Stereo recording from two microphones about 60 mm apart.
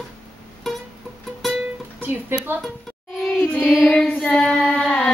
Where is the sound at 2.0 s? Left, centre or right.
Right.